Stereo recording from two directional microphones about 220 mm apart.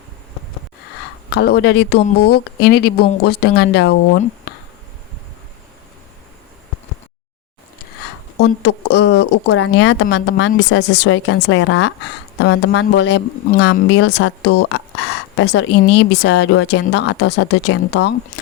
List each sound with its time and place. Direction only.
1.3 s speech: 45° left (ahead or behind)
8.4 s speech: 50° left (ahead or behind)